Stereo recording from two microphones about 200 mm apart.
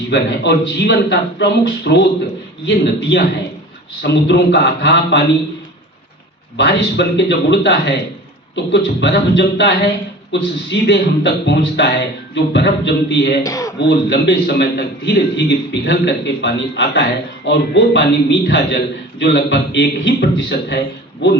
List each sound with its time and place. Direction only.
0.1 s a man's voice: 60° left (ahead or behind)
6.6 s a man's voice: 55° left (ahead or behind)
13.4 s a man's voice: 15° left (ahead or behind)
14.1 s a man's voice: 60° left (ahead or behind)